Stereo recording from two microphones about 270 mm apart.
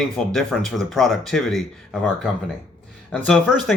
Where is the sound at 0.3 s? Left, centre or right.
Centre.